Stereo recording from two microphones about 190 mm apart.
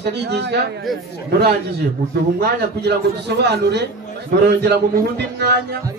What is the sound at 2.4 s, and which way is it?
Speech, 60° right (ahead or behind).